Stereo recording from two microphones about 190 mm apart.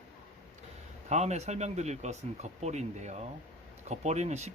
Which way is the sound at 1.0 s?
35° right (ahead or behind).